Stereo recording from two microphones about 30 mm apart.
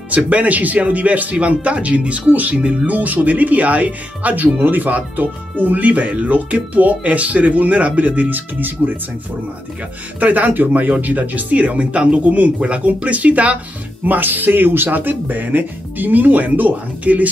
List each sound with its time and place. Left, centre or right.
0.1 s speech: right
1.3 s speech: right
2.9 s speech: right
10.2 s speech: right
11.5 s speech: right
12.8 s speech: right
14.0 s speech: right